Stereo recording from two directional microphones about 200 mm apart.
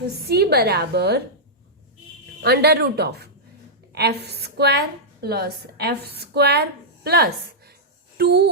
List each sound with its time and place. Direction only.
0.3 s a woman's voice: 50° right (ahead or behind)
2.4 s a woman's voice: 55° right (ahead or behind)